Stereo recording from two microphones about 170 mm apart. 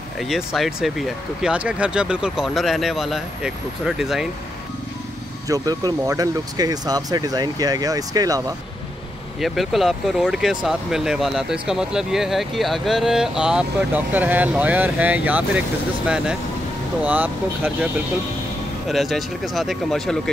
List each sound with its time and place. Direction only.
0.2 s speech: centre (ahead or behind)
5.5 s speech: 20° right (ahead or behind)
9.4 s speech: centre (ahead or behind)
17.0 s speech: 10° right (ahead or behind)
18.9 s speech: centre (ahead or behind)